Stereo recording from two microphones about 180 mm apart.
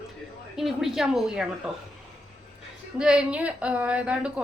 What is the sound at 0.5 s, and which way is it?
A woman's voice, centre (ahead or behind).